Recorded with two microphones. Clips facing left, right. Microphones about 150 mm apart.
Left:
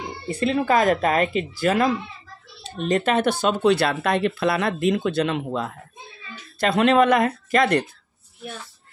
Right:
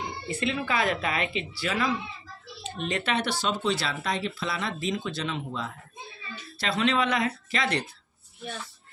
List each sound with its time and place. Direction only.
0.3 s speech: 40° left (ahead or behind)